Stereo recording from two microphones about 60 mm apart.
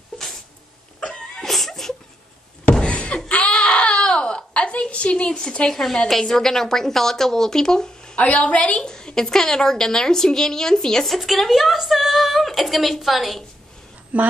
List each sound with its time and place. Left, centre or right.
1.0 s sneeze: centre
1.4 s whimper: centre
2.9 s door: left
3.3 s baby cry: centre
4.0 s a sound: centre
6.0 s a woman's voice: centre
14.1 s a woman's voice: right